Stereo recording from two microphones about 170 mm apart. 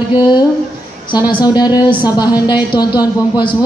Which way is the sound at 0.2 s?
25° left (ahead or behind).